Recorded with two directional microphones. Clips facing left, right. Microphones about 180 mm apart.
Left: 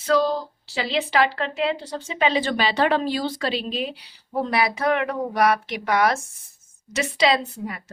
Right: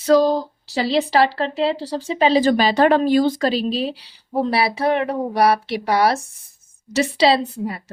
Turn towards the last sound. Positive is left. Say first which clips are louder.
# right 5 dB
turn(degrees=-30)  # may be behind; listen again after turning